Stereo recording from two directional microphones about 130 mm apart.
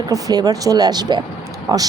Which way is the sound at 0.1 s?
30° right (ahead or behind).